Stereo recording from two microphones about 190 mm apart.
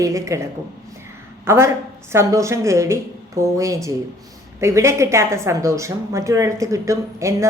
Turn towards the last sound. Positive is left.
turn(degrees=-15)  # may be behind; listen again after turning